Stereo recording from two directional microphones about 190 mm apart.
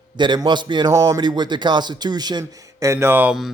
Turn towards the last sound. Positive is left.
turn(degrees=-5)  # may be behind; listen again after turning